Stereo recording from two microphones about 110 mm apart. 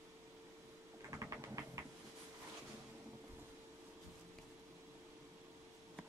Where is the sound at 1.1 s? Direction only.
30° right (ahead or behind).